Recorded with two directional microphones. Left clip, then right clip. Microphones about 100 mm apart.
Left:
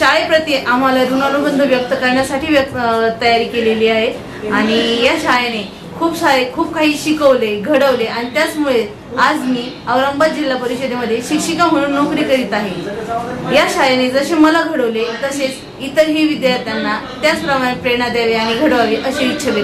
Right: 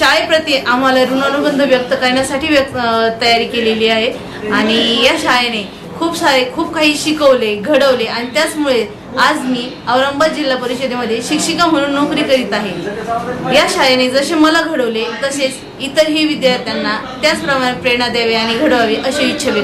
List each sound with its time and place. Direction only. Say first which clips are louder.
0.0 s a woman's voice: right 1 dB; 5° right (ahead or behind)
1.0 s a woman's voice: right 1 dB; 15° right (ahead or behind)
9.9 s a woman's voice: right 1 dB; 5° right (ahead or behind)
18.4 s a woman's voice: right 1 dB; 15° right (ahead or behind)